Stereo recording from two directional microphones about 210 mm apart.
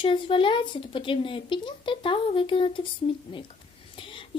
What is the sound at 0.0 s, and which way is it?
Child singing, 25° left (ahead or behind).